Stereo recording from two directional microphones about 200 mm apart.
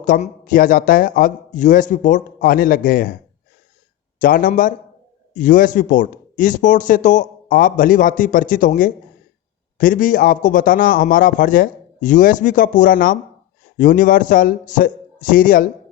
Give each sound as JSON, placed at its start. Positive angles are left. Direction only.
{"t": 0.0, "sound": "speech", "side_deg": 45}
{"t": 4.2, "sound": "speech", "side_deg": 45}